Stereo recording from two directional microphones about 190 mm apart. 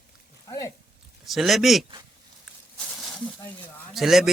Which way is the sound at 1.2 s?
Centre (ahead or behind).